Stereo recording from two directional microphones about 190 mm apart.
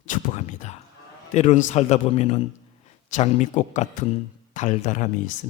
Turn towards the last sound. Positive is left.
turn(degrees=40)  # may be behind; listen again after turning